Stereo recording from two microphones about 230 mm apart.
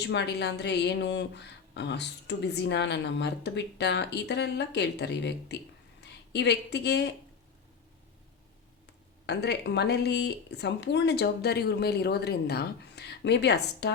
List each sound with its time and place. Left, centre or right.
0.0 s speech: left
9.2 s speech: left